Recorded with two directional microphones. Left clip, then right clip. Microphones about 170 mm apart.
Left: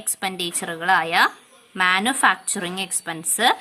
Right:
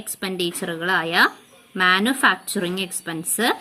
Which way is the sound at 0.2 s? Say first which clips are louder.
Right 1 dB; 20° left (ahead or behind).